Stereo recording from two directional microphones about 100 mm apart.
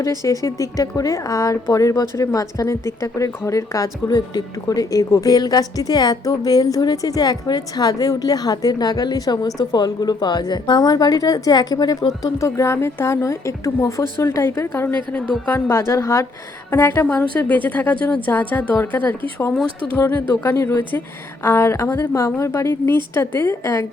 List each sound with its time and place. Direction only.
0.2 s a woman's voice: 35° left (ahead or behind)